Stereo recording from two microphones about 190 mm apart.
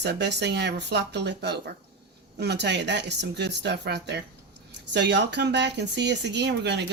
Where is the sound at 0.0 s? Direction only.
65° right (ahead or behind).